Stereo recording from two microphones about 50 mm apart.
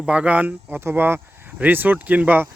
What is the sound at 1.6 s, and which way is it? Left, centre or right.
Speech, right.